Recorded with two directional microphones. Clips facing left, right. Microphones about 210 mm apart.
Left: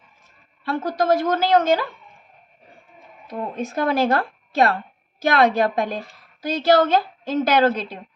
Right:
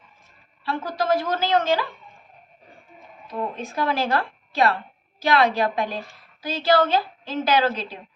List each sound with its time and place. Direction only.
0.6 s a woman's voice: 45° left (ahead or behind)
3.5 s a woman's voice: 45° left (ahead or behind)